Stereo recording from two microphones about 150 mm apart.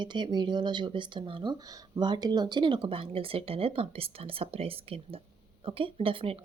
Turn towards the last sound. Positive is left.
turn(degrees=-35)  # may be behind; listen again after turning